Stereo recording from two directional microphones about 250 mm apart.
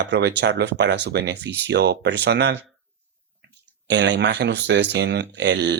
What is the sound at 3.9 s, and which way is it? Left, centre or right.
Speech, right.